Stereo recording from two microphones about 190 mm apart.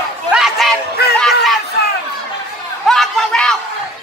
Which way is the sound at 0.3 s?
Centre (ahead or behind).